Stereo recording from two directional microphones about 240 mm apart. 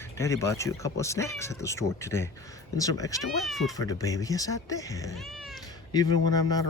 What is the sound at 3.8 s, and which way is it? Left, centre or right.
Speech, centre.